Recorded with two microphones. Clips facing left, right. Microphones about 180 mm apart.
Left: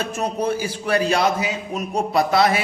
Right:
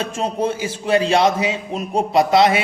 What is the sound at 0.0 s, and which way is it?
A man's voice, 25° right (ahead or behind).